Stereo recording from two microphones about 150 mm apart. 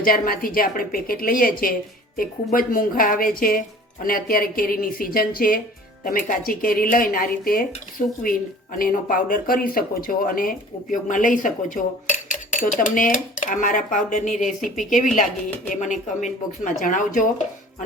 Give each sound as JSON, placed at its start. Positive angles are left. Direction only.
{"t": 0.0, "sound": "a woman's voice", "side_deg": 70}